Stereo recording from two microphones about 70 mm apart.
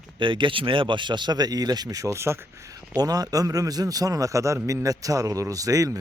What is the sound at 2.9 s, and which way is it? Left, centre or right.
Speech, right.